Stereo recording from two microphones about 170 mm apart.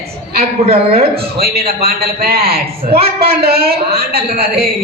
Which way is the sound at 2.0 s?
65° right (ahead or behind).